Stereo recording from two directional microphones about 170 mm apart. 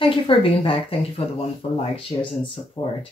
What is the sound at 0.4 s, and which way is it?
Speech, 35° left (ahead or behind).